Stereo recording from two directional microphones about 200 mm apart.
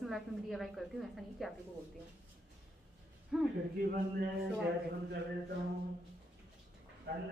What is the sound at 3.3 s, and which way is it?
Speech, centre (ahead or behind).